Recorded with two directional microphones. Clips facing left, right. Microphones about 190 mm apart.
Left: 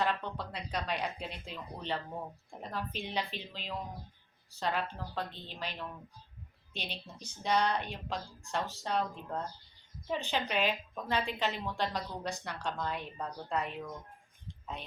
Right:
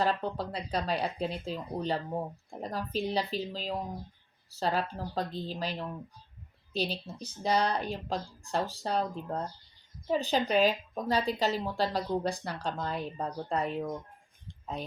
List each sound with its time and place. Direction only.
0.0 s a woman's voice: 35° right (ahead or behind)